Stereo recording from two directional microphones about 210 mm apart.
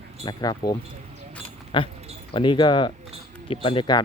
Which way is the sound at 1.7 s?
25° left (ahead or behind).